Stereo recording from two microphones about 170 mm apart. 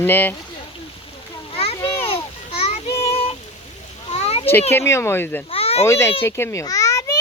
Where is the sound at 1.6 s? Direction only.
35° left (ahead or behind).